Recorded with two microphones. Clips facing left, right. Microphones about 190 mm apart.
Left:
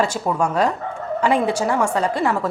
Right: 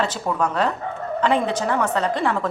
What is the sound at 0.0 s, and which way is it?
A woman's voice, 10° left (ahead or behind).